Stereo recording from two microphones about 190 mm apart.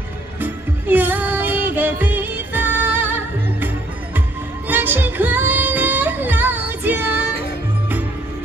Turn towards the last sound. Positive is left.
turn(degrees=-10)  # may be behind; listen again after turning